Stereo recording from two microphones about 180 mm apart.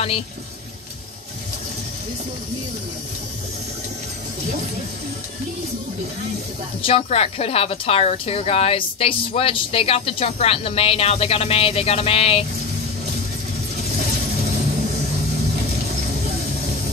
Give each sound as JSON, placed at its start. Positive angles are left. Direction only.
{"t": 6.8, "sound": "speech", "side_deg": 30}